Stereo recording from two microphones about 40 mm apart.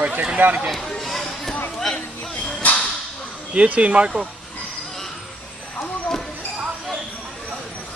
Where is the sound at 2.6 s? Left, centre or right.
Left.